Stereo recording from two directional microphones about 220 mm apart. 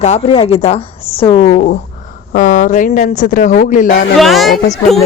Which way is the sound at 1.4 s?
40° left (ahead or behind).